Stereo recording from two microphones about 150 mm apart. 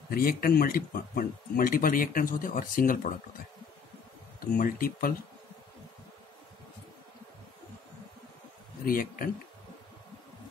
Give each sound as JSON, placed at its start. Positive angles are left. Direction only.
{"t": 0.1, "sound": "speech", "side_deg": 75}
{"t": 4.6, "sound": "speech", "side_deg": 70}
{"t": 8.8, "sound": "speech", "side_deg": 70}